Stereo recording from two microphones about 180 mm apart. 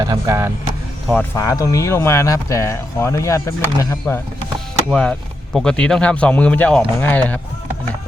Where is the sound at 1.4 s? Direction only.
20° left (ahead or behind).